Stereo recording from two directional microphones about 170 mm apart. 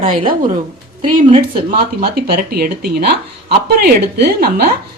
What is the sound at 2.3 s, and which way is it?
Speech, 65° right (ahead or behind).